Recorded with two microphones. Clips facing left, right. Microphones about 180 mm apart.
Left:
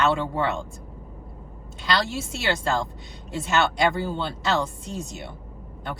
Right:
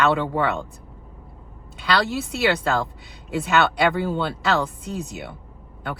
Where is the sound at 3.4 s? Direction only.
60° right (ahead or behind).